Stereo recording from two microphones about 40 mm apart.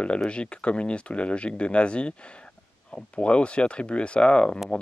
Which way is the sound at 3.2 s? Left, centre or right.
Left.